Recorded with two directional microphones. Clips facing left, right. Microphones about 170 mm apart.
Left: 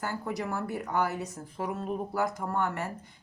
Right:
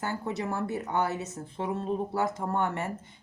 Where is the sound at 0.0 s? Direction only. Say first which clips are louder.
Right 1 dB; 20° right (ahead or behind).